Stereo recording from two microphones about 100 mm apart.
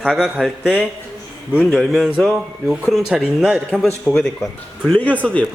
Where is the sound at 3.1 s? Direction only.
10° right (ahead or behind).